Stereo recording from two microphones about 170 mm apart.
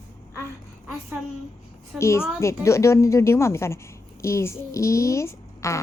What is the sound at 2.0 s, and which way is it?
A child's voice, 15° left (ahead or behind).